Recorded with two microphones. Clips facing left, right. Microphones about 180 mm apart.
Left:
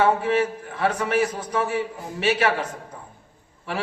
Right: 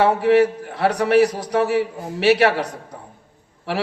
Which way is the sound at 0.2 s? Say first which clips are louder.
Right 7 dB; 70° right (ahead or behind).